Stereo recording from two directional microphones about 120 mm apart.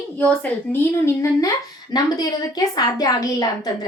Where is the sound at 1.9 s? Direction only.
35° left (ahead or behind).